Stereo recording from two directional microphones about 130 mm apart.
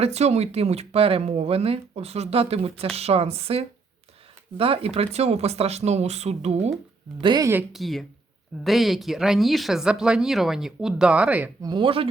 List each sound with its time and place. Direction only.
0.0 s speech: 55° right (ahead or behind)
7.2 s speech: 35° right (ahead or behind)
7.7 s speech: centre (ahead or behind)
11.6 s speech: 35° right (ahead or behind)